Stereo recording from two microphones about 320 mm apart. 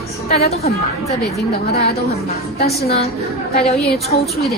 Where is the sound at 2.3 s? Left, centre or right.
Centre.